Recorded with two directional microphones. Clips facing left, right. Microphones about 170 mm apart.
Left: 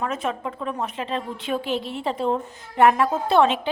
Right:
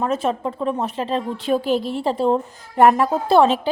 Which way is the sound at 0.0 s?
30° right (ahead or behind).